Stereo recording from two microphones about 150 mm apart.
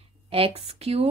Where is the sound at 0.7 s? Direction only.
40° right (ahead or behind).